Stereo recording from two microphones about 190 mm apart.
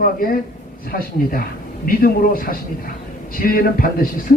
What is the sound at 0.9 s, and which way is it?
A man's voice, 50° left (ahead or behind).